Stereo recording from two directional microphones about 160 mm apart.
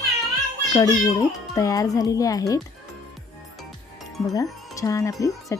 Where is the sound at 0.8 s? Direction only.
20° left (ahead or behind).